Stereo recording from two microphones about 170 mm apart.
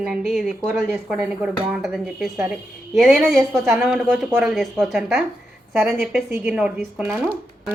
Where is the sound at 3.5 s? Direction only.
15° right (ahead or behind).